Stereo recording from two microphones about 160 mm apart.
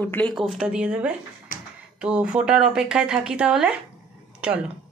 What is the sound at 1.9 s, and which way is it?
Speech, 5° right (ahead or behind).